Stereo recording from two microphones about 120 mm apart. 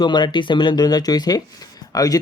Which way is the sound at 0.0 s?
40° left (ahead or behind).